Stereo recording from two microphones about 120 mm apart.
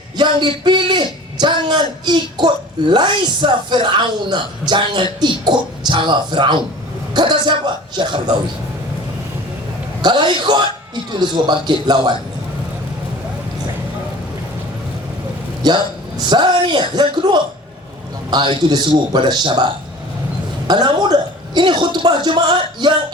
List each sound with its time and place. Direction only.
0.2 s a man's voice: 40° right (ahead or behind)
10.0 s a man's voice: 40° right (ahead or behind)
15.6 s a man's voice: 35° right (ahead or behind)